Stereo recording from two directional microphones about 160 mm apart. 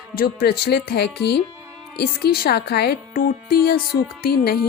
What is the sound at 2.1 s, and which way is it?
Speech, 75° left (ahead or behind).